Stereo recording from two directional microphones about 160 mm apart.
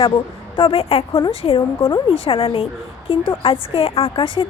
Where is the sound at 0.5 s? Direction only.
35° left (ahead or behind).